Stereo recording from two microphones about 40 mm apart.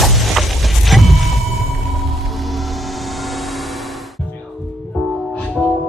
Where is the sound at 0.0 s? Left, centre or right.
Centre.